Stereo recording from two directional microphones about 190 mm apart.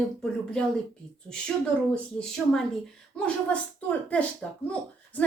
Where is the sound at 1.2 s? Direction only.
5° left (ahead or behind).